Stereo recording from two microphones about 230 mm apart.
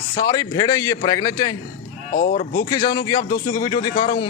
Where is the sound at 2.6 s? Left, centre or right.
Centre.